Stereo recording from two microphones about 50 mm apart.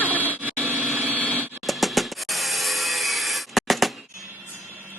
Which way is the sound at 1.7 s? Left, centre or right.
Centre.